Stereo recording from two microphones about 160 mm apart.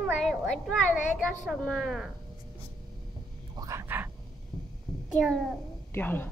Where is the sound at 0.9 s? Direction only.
50° left (ahead or behind).